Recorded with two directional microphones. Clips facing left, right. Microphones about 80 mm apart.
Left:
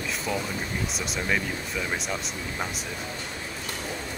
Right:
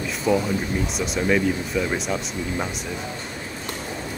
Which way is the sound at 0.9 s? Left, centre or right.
Centre.